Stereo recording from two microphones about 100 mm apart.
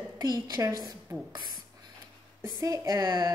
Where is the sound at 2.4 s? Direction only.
35° right (ahead or behind).